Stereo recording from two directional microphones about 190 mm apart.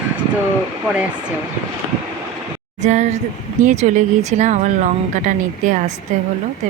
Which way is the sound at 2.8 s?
40° right (ahead or behind).